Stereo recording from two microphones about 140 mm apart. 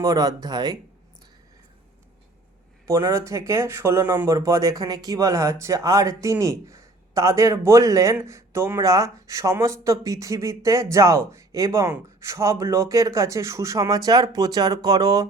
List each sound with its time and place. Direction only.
0.0 s speech: 25° right (ahead or behind)
2.8 s speech: 20° right (ahead or behind)